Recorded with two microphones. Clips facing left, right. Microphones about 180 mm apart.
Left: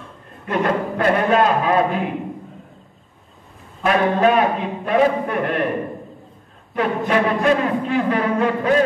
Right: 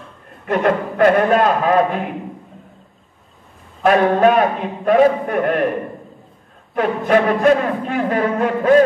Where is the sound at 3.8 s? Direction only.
45° right (ahead or behind).